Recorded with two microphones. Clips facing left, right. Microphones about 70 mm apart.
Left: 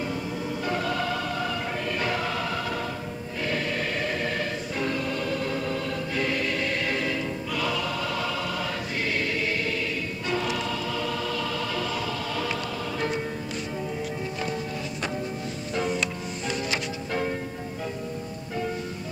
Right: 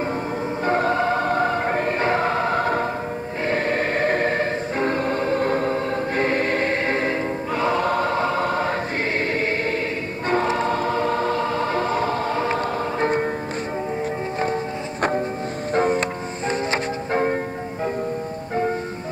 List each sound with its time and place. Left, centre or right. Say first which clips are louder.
0.7 s music: right 9 dB; right
3.4 s choir: right 7 dB; right
13.0 s music: right 8 dB; right
14.4 s music: right 8 dB; right